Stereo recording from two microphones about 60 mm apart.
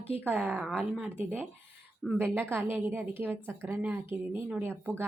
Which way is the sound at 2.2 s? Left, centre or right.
Right.